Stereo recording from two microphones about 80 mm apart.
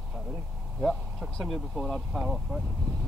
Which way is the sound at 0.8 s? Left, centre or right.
Centre.